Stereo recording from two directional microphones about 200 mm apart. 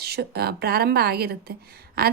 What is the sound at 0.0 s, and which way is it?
Speech, 55° right (ahead or behind).